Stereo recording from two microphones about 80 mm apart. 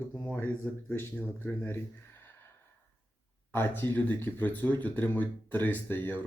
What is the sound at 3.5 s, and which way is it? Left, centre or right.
Speech, left.